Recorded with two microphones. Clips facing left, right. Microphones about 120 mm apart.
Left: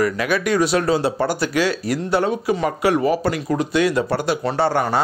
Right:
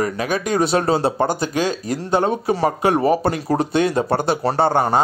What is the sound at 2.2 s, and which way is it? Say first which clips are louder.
Speech: right 1 dB; 35° right (ahead or behind).